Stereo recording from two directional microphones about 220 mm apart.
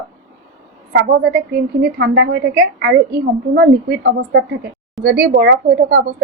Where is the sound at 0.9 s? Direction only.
50° right (ahead or behind).